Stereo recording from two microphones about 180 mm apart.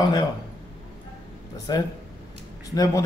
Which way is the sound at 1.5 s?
20° left (ahead or behind).